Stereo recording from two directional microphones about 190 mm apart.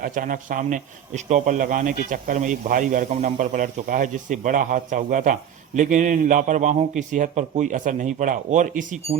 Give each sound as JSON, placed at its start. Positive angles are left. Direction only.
{"t": 0.0, "sound": "speech", "side_deg": -45}